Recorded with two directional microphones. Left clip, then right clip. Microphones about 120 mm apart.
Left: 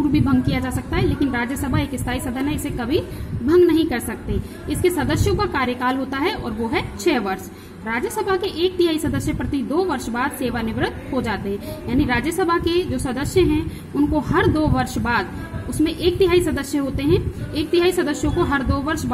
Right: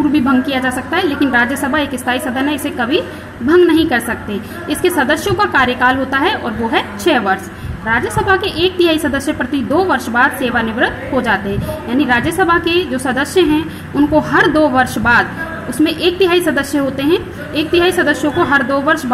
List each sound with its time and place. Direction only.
0.1 s a woman's voice: 20° left (ahead or behind)